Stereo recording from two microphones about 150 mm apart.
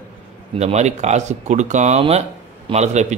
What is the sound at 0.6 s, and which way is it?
Speech, 45° right (ahead or behind).